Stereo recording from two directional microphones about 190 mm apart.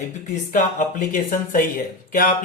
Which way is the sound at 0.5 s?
40° left (ahead or behind).